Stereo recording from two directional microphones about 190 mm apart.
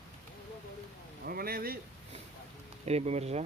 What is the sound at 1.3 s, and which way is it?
Speech, 50° right (ahead or behind).